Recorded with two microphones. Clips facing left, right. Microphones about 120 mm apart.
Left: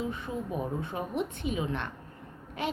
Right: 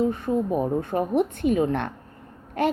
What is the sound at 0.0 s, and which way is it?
Speech, 45° right (ahead or behind).